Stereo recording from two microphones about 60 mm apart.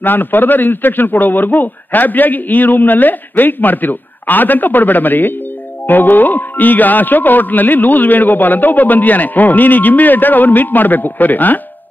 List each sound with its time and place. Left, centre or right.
0.0 s speech: left